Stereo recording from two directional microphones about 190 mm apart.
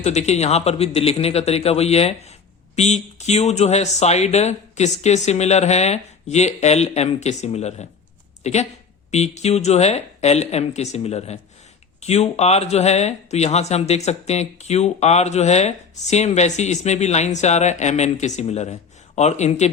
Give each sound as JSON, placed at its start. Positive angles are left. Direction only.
{"t": 0.0, "sound": "speech", "side_deg": 35}